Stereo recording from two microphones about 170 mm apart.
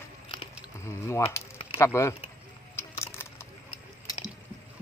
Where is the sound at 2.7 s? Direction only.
15° left (ahead or behind).